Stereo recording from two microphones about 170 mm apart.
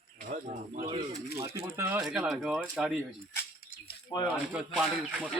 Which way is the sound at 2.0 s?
Centre (ahead or behind).